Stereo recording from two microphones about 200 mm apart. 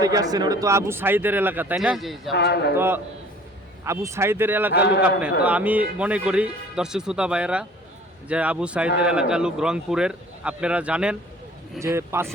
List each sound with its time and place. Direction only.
0.0 s speech: 20° right (ahead or behind); by 2.3 s centre (ahead or behind)
2.3 s speech: 55° left (ahead or behind)
2.7 s speech: 10° right (ahead or behind)
4.7 s speech: 55° left (ahead or behind)
5.4 s speech: 5° right (ahead or behind)